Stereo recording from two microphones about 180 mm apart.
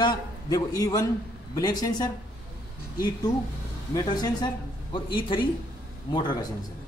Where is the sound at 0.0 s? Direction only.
20° left (ahead or behind).